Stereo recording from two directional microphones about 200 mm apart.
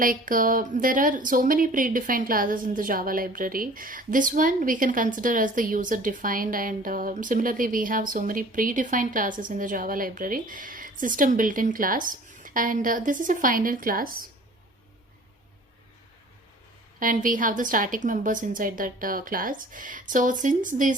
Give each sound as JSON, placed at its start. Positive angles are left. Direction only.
{"t": 0.0, "sound": "a woman's voice", "side_deg": -45}
{"t": 17.0, "sound": "a woman's voice", "side_deg": -40}